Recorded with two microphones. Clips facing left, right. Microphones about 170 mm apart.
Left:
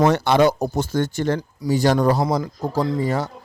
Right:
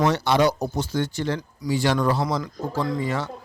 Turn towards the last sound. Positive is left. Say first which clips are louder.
# left 4 dB
turn(degrees=40)  # may be behind; listen again after turning